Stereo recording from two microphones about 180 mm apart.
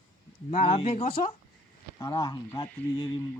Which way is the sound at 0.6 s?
30° left (ahead or behind).